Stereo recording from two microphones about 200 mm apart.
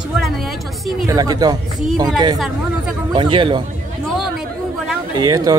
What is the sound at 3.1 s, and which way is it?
Speech, 25° right (ahead or behind).